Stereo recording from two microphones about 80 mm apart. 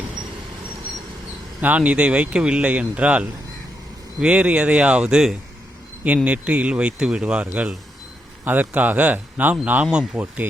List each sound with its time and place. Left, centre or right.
1.6 s speech: centre
9.8 s speech: centre
10.2 s speech: right